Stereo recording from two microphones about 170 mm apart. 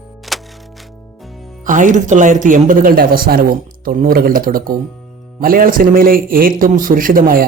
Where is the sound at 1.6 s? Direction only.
50° right (ahead or behind).